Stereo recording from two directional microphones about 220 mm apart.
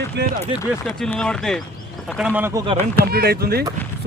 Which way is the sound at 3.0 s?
45° right (ahead or behind).